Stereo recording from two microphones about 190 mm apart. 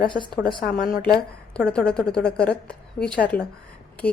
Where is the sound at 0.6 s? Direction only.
55° left (ahead or behind).